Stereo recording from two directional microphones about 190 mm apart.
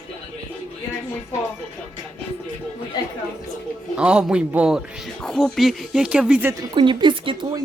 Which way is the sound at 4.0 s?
5° right (ahead or behind).